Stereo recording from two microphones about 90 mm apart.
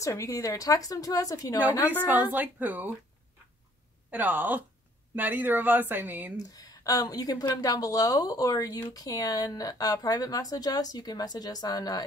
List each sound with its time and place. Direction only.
0.0 s a woman's voice: 35° left (ahead or behind)
2.0 s speech: 20° right (ahead or behind)
4.1 s speech: 20° right (ahead or behind)
6.5 s a woman's voice: 40° left (ahead or behind)